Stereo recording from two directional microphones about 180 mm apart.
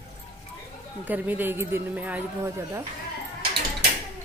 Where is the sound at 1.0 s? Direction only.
10° right (ahead or behind).